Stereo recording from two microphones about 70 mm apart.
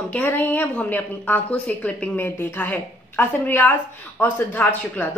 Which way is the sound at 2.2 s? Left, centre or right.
Left.